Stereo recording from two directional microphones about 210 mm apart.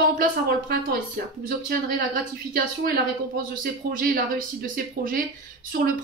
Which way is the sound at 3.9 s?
45° right (ahead or behind).